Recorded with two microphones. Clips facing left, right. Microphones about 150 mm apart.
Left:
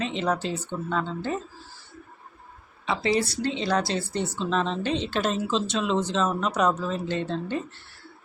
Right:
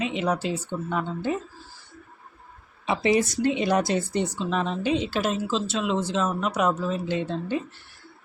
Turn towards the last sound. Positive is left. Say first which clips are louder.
# right 1 dB
turn(degrees=-10)  # may be behind; listen again after turning